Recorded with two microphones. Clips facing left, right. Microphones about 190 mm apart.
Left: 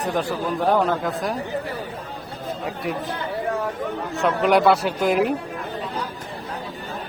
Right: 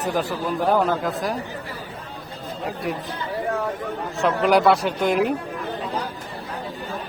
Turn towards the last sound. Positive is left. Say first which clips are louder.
# left 1 dB
turn(degrees=0)  # may be behind; listen again after turning